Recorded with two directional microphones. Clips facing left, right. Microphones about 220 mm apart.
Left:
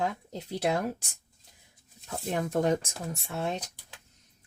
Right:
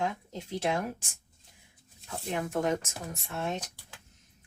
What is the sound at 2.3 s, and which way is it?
A woman's voice, 35° left (ahead or behind).